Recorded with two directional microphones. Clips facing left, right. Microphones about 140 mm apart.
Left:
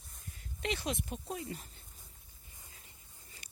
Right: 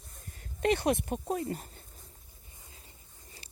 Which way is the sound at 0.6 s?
55° right (ahead or behind).